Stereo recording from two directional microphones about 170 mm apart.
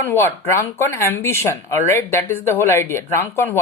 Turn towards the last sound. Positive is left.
turn(degrees=15)  # may be behind; listen again after turning